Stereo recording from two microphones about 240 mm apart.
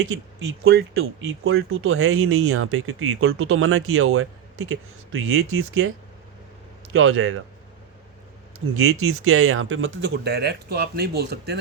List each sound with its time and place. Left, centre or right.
0.6 s speech: right
6.9 s speech: right
8.8 s speech: right